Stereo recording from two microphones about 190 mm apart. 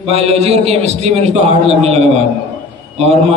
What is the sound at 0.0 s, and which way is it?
A man's voice, 35° right (ahead or behind).